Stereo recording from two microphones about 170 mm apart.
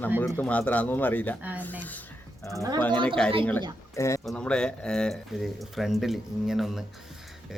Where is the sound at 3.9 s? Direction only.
15° left (ahead or behind).